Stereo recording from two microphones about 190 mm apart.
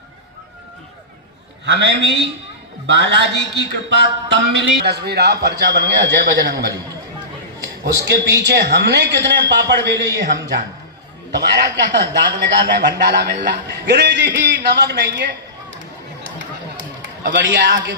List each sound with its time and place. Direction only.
1.6 s a man's voice: 65° right (ahead or behind)
8.0 s speech: 65° right (ahead or behind)
17.2 s a man's voice: 70° right (ahead or behind)